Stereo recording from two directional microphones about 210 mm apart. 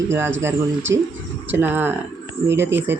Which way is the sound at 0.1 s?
10° right (ahead or behind).